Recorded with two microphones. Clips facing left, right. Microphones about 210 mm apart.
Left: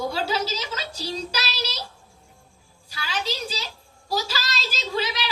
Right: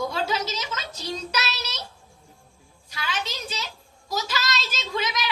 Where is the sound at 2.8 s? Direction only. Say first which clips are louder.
Left 2 dB; 30° left (ahead or behind).